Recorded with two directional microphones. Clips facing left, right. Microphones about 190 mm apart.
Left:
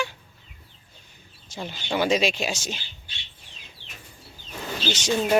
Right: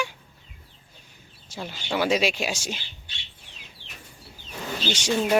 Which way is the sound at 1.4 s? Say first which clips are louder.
Left 1 dB; 10° right (ahead or behind).